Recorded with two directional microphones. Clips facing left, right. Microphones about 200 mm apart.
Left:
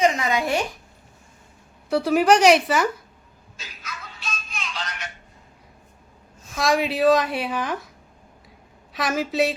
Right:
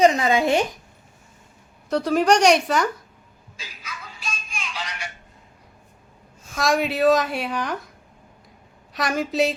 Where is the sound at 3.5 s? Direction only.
10° right (ahead or behind).